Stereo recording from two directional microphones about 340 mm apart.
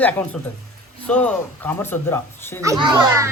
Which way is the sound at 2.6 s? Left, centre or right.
Centre.